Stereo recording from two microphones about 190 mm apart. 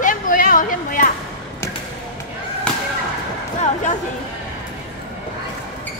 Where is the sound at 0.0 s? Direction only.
45° left (ahead or behind).